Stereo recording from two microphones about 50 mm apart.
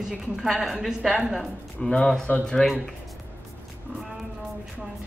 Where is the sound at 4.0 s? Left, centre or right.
Centre.